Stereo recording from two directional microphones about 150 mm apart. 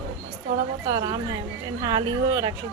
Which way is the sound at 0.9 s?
25° right (ahead or behind).